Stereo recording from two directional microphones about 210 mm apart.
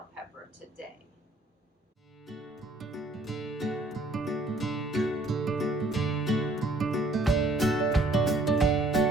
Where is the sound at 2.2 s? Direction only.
Centre (ahead or behind).